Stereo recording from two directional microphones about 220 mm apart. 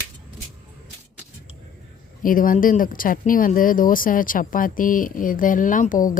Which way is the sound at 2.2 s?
40° left (ahead or behind).